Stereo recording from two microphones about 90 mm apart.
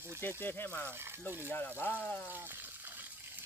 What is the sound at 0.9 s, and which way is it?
Speech, 25° right (ahead or behind).